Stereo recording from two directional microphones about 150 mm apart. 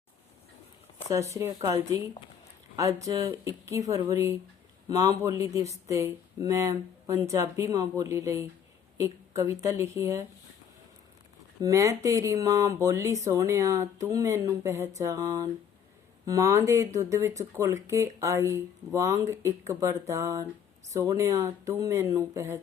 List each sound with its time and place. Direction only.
1.0 s speech: 20° right (ahead or behind)
11.6 s speech: 20° right (ahead or behind)